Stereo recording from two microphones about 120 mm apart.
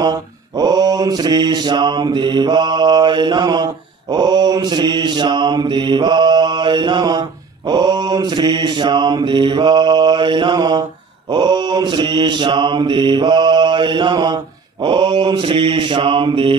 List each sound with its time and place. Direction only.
0.0 s mantra: 35° right (ahead or behind)